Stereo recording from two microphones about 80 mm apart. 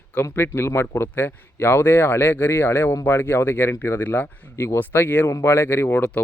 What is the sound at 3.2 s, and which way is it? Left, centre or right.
Speech, left.